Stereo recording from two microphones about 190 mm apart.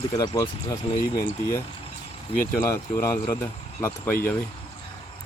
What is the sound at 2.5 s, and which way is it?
Speech, 15° left (ahead or behind).